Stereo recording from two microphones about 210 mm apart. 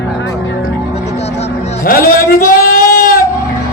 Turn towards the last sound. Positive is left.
turn(degrees=45)  # may be behind; listen again after turning